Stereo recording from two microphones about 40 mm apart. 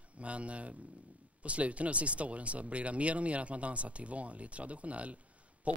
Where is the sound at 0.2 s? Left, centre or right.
Right.